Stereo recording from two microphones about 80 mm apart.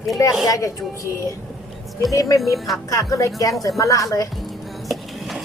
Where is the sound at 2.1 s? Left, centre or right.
Left.